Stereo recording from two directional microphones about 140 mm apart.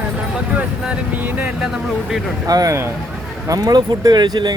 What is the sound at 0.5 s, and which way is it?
Speech, 10° right (ahead or behind).